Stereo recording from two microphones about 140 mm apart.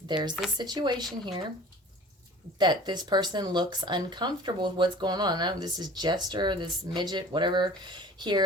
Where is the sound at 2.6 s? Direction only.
30° right (ahead or behind).